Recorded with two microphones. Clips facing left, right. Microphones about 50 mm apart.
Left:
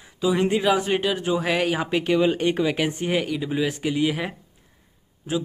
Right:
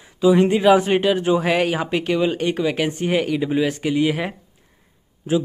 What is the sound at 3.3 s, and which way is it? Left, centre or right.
Speech, centre.